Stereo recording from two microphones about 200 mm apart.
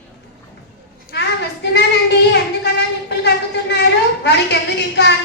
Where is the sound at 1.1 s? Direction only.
60° left (ahead or behind).